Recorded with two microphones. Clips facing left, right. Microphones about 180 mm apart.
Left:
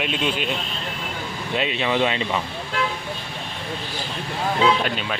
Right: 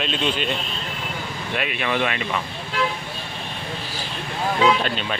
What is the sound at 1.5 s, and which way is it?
Speech, 25° left (ahead or behind).